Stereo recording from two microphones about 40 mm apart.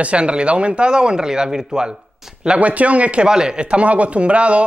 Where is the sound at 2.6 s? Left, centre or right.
Right.